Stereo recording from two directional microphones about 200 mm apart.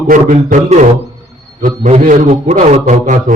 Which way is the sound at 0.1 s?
40° right (ahead or behind).